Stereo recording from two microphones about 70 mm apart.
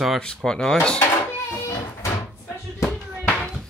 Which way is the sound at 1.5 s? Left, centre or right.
Left.